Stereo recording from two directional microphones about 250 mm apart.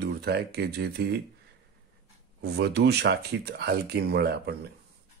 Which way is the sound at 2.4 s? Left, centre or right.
Right.